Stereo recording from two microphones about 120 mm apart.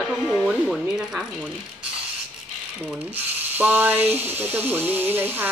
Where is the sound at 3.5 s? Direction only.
15° right (ahead or behind).